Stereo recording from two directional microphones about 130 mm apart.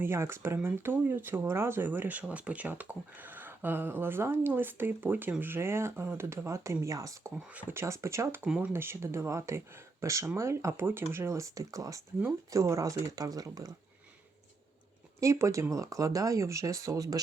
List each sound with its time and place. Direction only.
0.0 s speech: 20° right (ahead or behind)
7.5 s speech: 15° right (ahead or behind)
8.4 s speech: 5° right (ahead or behind)
8.7 s speech: 20° right (ahead or behind)
15.2 s speech: 20° right (ahead or behind)